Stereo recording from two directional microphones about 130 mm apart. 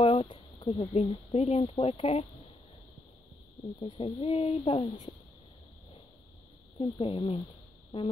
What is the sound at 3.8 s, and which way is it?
Speech, 45° left (ahead or behind).